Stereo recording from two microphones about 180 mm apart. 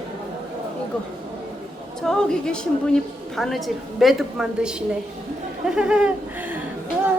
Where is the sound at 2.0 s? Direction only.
5° left (ahead or behind).